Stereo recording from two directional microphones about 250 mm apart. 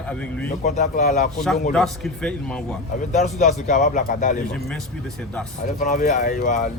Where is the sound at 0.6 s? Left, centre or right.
Left.